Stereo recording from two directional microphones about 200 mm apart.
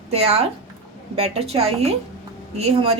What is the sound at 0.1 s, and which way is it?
A woman's voice, 30° right (ahead or behind).